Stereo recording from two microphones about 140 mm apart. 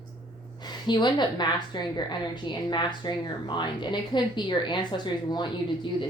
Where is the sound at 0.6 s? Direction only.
30° left (ahead or behind).